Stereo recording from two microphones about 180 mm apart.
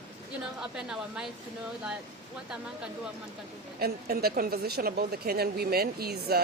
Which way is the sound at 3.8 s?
60° right (ahead or behind).